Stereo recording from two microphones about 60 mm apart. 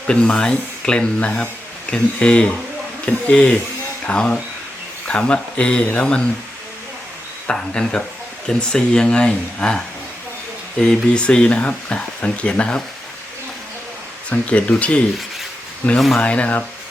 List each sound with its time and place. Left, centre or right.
0.1 s speech: centre
7.4 s speech: centre
14.3 s speech: left